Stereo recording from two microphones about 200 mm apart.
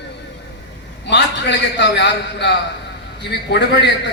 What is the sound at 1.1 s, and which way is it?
A man's voice, 60° left (ahead or behind).